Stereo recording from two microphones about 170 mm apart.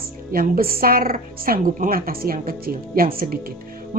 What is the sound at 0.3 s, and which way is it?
Speech, 60° right (ahead or behind).